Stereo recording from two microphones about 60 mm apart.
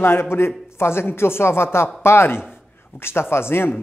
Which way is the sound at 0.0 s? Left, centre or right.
Left.